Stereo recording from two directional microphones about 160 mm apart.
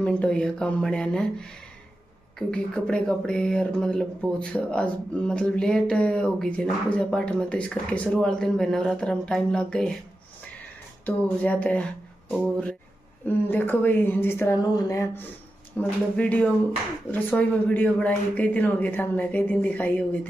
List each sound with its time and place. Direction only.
0.0 s speech: 5° left (ahead or behind)
11.1 s speech: 10° left (ahead or behind)